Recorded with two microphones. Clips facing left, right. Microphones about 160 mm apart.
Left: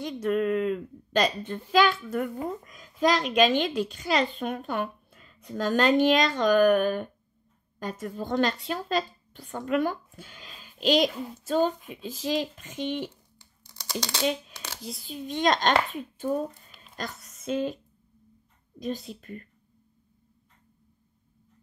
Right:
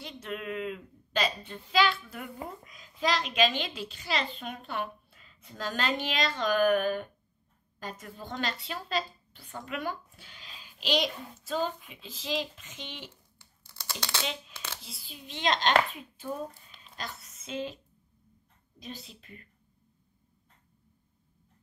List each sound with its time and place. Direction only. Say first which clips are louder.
0.0 s a child's voice: left 12 dB; 45° left (ahead or behind)
13.1 s a sound: left 2 dB; 15° left (ahead or behind)
14.8 s a child's voice: left 12 dB; 45° left (ahead or behind)
18.8 s a child's voice: left 11 dB; 45° left (ahead or behind)